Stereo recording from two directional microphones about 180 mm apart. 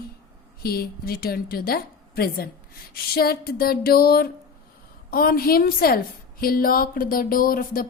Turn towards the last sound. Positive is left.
turn(degrees=55)  # may be behind; listen again after turning